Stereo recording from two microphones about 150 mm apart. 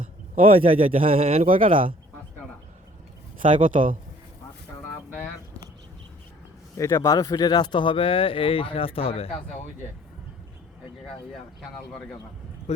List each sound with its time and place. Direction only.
0.4 s a man's voice: 35° right (ahead or behind)
3.5 s speech: 60° right (ahead or behind)
6.7 s speech: 20° left (ahead or behind); by 9.3 s 40° left (ahead or behind)
11.7 s a man's voice: 5° left (ahead or behind)